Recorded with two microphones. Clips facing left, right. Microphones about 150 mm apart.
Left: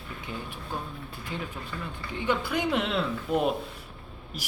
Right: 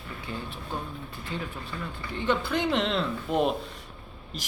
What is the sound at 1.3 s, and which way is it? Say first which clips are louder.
Speech: right 1 dB; 15° left (ahead or behind).